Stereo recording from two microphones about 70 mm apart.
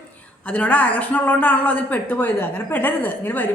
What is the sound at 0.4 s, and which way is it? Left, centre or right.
A woman's voice, centre.